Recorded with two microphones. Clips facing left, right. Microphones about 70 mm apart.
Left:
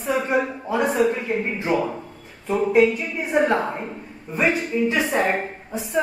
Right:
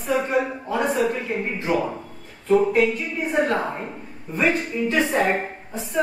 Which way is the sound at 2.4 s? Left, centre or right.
Centre.